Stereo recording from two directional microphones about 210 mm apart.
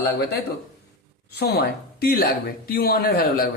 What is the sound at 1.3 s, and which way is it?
Speech, 50° left (ahead or behind).